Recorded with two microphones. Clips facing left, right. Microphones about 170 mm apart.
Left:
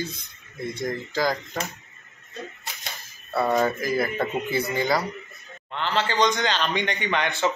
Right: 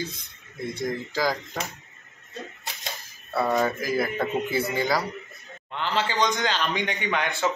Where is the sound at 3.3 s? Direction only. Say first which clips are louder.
Left 1 dB; centre (ahead or behind).